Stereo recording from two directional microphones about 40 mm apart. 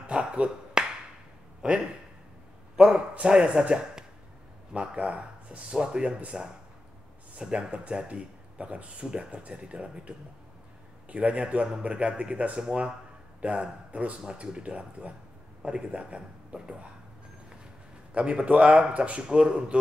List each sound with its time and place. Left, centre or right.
0.1 s finger snapping: right
0.8 s wood block: centre
1.6 s a man's voice: right
18.1 s a man's voice: right